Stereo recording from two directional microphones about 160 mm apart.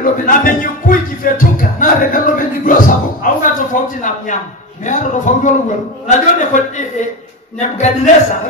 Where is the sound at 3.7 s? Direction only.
55° left (ahead or behind).